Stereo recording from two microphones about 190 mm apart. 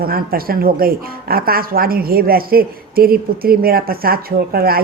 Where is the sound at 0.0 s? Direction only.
50° right (ahead or behind).